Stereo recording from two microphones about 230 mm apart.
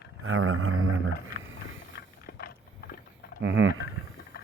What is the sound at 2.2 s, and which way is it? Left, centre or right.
Vehicle, left.